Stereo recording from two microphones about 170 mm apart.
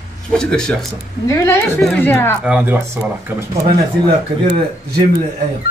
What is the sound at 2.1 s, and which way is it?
Speech, 15° left (ahead or behind).